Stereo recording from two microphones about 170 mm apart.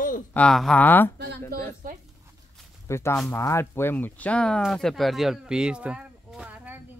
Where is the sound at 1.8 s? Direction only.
55° right (ahead or behind).